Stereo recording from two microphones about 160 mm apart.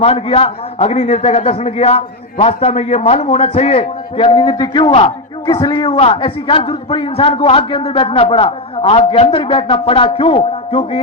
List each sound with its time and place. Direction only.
0.0 s a man's voice: 40° left (ahead or behind)